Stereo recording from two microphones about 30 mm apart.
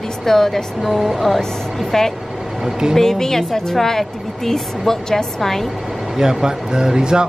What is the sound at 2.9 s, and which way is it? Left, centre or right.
Speech, centre.